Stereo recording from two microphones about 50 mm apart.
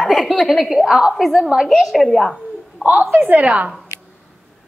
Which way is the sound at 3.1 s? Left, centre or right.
Right.